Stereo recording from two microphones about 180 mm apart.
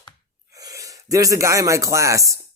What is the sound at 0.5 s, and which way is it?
A woman's voice, 20° right (ahead or behind).